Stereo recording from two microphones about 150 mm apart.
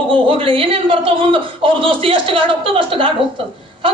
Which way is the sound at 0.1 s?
35° right (ahead or behind).